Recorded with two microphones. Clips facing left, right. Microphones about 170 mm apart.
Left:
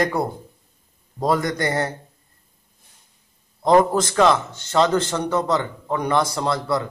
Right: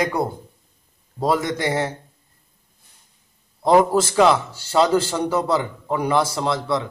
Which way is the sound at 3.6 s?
5° right (ahead or behind).